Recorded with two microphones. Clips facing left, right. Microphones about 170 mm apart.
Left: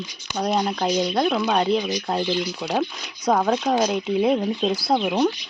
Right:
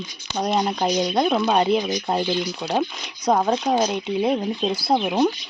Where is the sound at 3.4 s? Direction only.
15° right (ahead or behind).